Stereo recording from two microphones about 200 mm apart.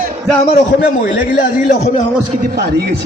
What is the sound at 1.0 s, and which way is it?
A man's voice, 45° left (ahead or behind).